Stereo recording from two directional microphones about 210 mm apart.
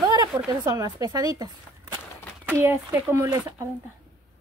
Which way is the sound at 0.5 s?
15° right (ahead or behind).